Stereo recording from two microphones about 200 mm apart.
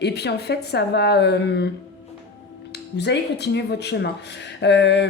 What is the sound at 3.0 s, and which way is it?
A woman's voice, 60° left (ahead or behind).